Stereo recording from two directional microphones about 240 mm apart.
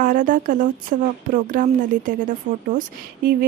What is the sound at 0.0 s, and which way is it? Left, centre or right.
Speech, right.